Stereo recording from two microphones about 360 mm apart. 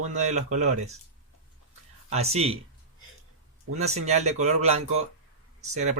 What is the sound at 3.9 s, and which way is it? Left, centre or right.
Speech, centre.